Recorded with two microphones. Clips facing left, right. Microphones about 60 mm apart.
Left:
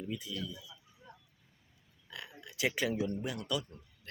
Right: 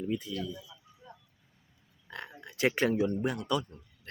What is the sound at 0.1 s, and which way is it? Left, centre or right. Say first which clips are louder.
Speech: right 6 dB; right.